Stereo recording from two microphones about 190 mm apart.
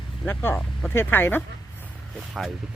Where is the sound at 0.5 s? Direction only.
5° left (ahead or behind).